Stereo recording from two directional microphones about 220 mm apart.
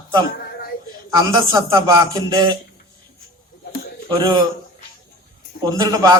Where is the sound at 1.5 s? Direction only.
15° right (ahead or behind).